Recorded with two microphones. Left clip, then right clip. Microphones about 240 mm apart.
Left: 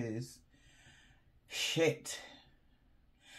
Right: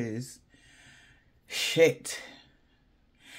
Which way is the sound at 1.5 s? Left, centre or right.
Right.